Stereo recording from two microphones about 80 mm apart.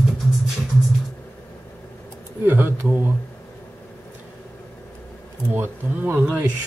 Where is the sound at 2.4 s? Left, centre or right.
Right.